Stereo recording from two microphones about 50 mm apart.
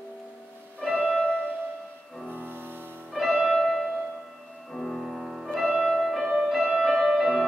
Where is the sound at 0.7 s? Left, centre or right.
Left.